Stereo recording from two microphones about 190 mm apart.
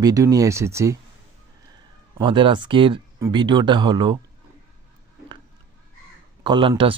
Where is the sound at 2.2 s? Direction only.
25° right (ahead or behind).